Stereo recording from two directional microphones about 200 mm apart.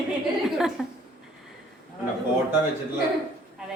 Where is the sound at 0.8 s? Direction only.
Centre (ahead or behind).